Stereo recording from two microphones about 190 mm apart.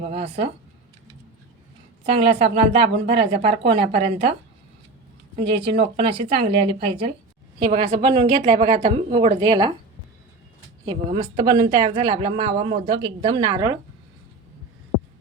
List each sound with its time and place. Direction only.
0.0 s speech: 35° right (ahead or behind)
2.0 s speech: 30° right (ahead or behind)
5.4 s a woman's voice: 30° right (ahead or behind)
10.8 s a woman's voice: 30° right (ahead or behind)